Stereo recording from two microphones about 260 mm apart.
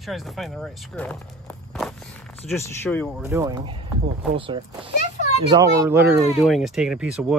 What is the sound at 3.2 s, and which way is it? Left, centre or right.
Speech, centre.